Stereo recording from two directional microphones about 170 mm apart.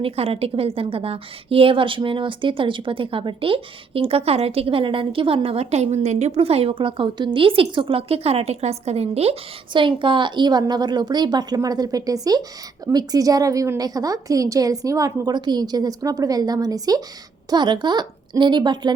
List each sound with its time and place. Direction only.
0.0 s a woman's voice: 35° right (ahead or behind)